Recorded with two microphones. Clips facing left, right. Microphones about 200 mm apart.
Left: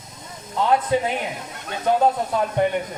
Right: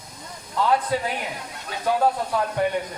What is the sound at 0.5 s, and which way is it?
Speech, 20° left (ahead or behind).